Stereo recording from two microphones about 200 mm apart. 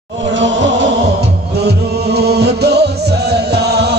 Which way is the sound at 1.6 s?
55° right (ahead or behind).